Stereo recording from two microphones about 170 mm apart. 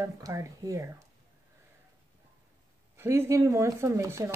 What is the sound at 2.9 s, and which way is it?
Speech, 15° right (ahead or behind).